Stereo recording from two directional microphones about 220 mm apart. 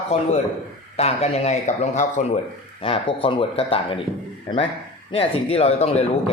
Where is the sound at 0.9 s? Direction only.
30° left (ahead or behind).